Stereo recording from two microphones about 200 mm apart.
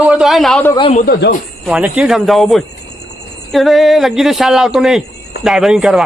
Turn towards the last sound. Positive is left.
turn(degrees=0)  # may be behind; listen again after turning